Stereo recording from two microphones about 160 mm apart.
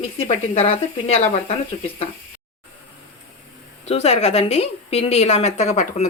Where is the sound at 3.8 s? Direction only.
40° left (ahead or behind).